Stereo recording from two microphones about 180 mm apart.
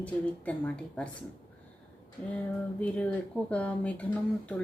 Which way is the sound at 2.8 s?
5° left (ahead or behind).